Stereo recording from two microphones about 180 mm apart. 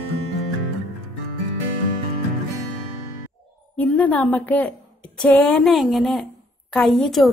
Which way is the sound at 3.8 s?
10° left (ahead or behind).